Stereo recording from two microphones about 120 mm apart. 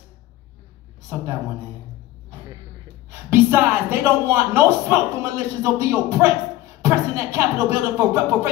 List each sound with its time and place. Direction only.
3.1 s speech: 20° right (ahead or behind)